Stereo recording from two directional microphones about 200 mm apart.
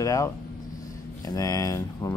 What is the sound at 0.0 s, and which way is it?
Speech, 15° left (ahead or behind).